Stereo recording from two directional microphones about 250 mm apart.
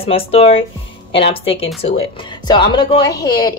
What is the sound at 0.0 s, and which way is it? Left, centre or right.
A woman's voice, left.